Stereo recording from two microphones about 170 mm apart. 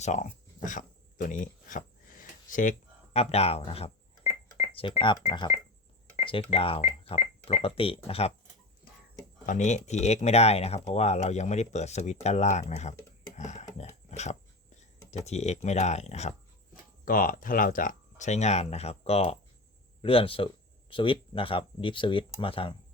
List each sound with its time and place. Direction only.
0.0 s a sound: 45° left (ahead or behind)
4.3 s telephone dialing: 50° left (ahead or behind)
4.8 s speech: 30° left (ahead or behind)
6.2 s speech: 30° left (ahead or behind)
9.5 s speech: 45° left (ahead or behind)
13.3 s a sound: 45° left (ahead or behind)
14.8 s speech: 40° left (ahead or behind)
17.1 s speech: 55° left (ahead or behind); by 22.7 s 30° left (ahead or behind)